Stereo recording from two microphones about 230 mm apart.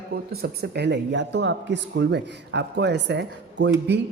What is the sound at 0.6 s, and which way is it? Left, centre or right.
Speech, right.